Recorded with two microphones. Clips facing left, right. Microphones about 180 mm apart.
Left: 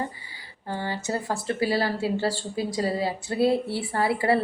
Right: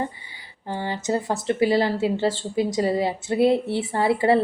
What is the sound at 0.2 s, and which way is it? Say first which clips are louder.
A woman's voice: even; 20° right (ahead or behind).